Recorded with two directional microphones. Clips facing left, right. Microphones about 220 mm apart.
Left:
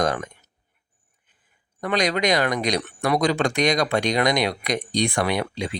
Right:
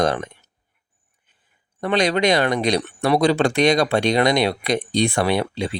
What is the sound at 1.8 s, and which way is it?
Speech, 30° right (ahead or behind).